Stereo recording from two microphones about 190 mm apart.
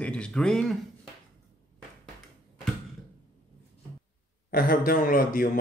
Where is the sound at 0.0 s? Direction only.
5° left (ahead or behind).